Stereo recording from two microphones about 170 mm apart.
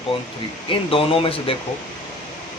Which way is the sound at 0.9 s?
30° left (ahead or behind).